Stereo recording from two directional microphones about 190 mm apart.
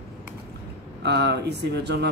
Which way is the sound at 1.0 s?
60° right (ahead or behind).